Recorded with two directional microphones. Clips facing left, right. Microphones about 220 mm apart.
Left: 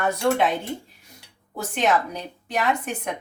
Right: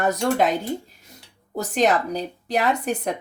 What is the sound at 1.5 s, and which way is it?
Speech, 40° right (ahead or behind).